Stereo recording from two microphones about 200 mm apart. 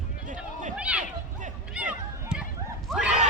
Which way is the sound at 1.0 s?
40° right (ahead or behind).